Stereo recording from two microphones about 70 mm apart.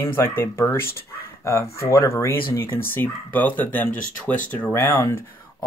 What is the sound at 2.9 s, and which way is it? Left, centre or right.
Speech, left.